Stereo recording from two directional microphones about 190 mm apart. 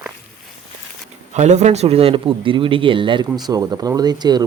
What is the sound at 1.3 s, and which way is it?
A man's voice, 35° right (ahead or behind).